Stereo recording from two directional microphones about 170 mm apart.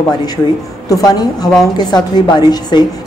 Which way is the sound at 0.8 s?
20° left (ahead or behind).